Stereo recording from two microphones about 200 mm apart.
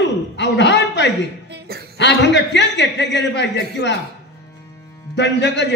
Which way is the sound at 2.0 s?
60° left (ahead or behind).